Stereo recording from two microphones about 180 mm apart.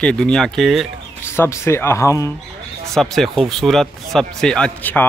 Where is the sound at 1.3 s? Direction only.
15° left (ahead or behind).